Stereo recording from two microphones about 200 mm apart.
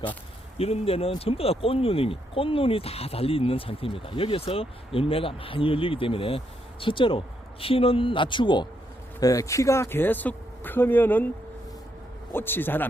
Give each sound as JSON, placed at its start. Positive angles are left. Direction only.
{"t": 0.6, "sound": "speech", "side_deg": 30}
{"t": 12.3, "sound": "speech", "side_deg": 10}